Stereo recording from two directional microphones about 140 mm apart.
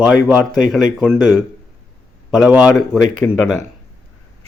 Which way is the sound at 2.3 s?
5° right (ahead or behind).